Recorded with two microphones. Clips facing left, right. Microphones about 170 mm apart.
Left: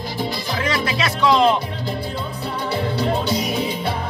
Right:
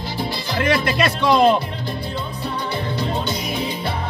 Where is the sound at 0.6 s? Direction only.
60° right (ahead or behind).